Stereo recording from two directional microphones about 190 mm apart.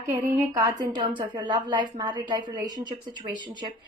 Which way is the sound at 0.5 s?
20° right (ahead or behind).